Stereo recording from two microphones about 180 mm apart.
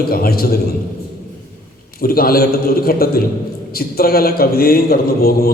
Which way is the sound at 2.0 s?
55° left (ahead or behind).